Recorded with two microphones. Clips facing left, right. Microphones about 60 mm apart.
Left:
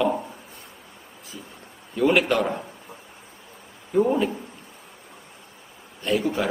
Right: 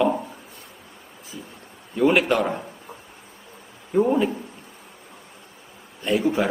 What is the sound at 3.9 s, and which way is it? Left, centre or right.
Speech, centre.